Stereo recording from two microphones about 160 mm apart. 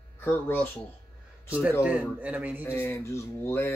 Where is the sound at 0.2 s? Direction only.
15° left (ahead or behind).